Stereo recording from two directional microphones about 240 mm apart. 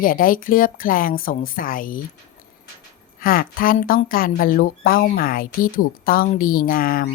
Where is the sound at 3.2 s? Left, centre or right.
Left.